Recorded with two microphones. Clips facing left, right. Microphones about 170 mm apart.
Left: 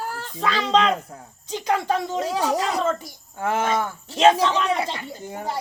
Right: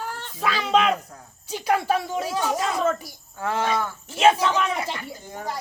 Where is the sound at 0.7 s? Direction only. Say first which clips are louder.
Even; 10° right (ahead or behind).